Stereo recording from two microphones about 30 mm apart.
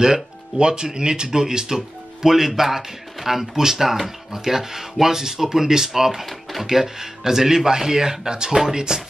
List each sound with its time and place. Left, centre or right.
0.0 s speech: right